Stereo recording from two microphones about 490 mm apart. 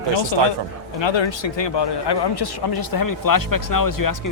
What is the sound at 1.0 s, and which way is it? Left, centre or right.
A man's voice, left.